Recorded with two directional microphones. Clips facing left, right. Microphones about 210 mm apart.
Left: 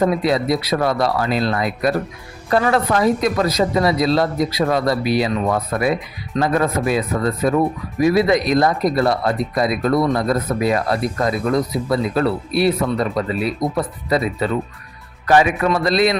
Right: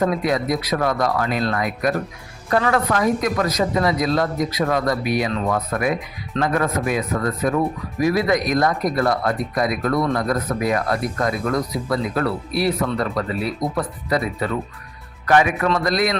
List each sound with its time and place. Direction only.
0.0 s speech: 30° left (ahead or behind)